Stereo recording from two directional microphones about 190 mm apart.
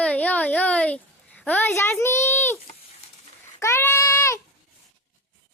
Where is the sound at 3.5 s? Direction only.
15° left (ahead or behind).